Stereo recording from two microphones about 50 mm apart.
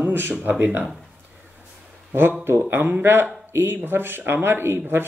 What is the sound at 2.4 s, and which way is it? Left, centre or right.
Speech, right.